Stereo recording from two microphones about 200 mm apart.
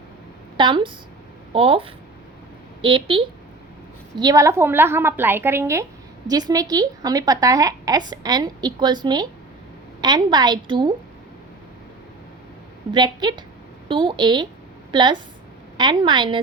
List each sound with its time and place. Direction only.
0.5 s a woman's voice: 25° right (ahead or behind)
12.9 s a woman's voice: 20° right (ahead or behind)